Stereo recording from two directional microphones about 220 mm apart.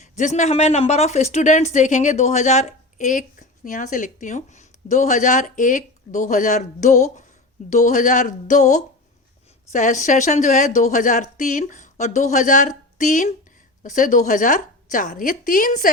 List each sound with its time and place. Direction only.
0.0 s speech: 30° left (ahead or behind)